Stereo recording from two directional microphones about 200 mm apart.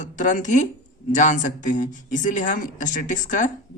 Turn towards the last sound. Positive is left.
turn(degrees=40)  # may be behind; listen again after turning